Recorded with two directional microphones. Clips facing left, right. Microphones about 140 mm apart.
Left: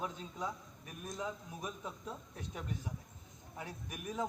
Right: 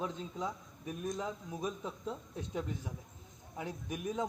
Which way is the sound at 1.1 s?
25° right (ahead or behind).